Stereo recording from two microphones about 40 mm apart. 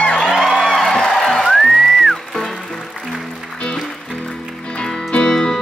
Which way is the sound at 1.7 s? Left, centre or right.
Centre.